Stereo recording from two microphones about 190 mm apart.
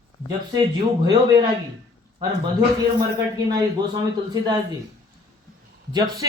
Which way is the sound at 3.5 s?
20° right (ahead or behind).